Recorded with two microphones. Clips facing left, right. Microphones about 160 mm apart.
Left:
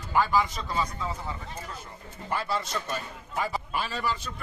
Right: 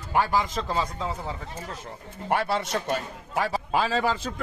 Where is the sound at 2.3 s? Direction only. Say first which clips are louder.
Right 5 dB; 70° right (ahead or behind).